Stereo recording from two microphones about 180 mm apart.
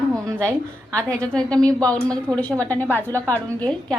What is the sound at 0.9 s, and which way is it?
A woman's voice, 5° left (ahead or behind).